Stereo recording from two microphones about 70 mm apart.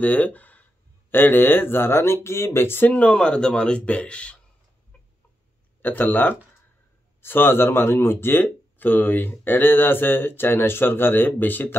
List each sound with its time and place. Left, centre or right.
0.0 s speech: left
2.9 s speech: centre
5.8 s speech: left